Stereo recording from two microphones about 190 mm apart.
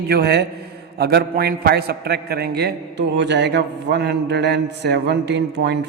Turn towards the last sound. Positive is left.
turn(degrees=-65)  # may be behind; listen again after turning